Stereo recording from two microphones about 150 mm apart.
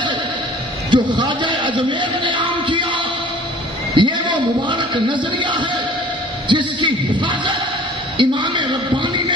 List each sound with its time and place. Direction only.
0.8 s a man's voice: 30° right (ahead or behind)
6.4 s a sound: 30° right (ahead or behind)
8.2 s a man's voice: 30° right (ahead or behind)